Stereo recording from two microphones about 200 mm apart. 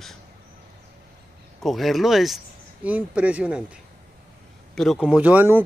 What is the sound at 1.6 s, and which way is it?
Speech, centre (ahead or behind).